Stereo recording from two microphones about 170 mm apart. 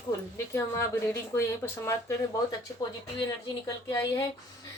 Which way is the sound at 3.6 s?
20° left (ahead or behind).